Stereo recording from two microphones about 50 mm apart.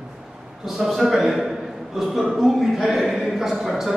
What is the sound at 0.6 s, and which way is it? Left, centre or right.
A man's voice, centre.